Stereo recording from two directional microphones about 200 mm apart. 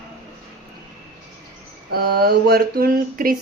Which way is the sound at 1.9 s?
50° right (ahead or behind).